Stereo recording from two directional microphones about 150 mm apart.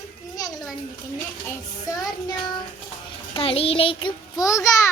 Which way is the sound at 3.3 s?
40° left (ahead or behind).